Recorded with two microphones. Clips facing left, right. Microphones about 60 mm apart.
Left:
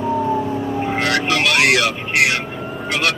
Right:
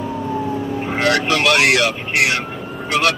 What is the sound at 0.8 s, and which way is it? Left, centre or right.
Vehicle, centre.